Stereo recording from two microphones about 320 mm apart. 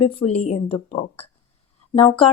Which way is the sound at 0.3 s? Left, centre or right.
Centre.